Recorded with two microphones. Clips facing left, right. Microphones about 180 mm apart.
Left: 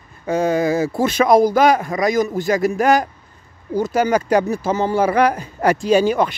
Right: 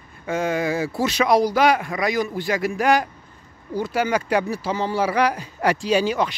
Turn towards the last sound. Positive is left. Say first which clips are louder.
# left 5 dB
turn(degrees=50)  # may be behind; listen again after turning